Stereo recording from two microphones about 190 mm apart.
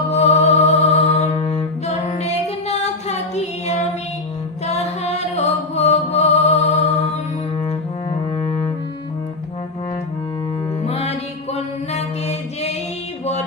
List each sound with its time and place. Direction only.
0.1 s music: 35° left (ahead or behind)
4.6 s chant: 35° left (ahead or behind)
8.1 s music: 25° left (ahead or behind)
10.8 s music: 35° left (ahead or behind)
11.5 s chant: 35° left (ahead or behind)